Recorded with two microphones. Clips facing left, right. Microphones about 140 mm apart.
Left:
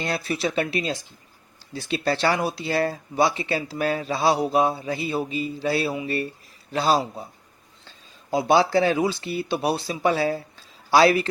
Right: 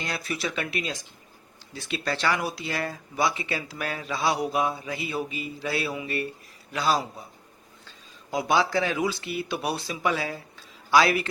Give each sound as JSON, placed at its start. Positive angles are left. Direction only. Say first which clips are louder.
{"t": 0.0, "sound": "a man's voice", "louder": "left 5 dB", "side_deg": 30}